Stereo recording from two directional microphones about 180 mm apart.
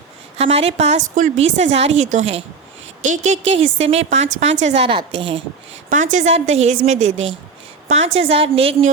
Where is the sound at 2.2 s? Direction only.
90° right.